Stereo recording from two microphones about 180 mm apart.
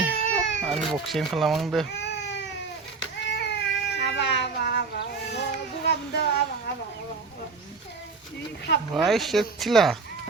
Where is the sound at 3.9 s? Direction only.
75° left (ahead or behind).